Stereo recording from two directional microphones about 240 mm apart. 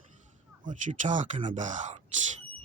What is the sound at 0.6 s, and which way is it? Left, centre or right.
Speech, right.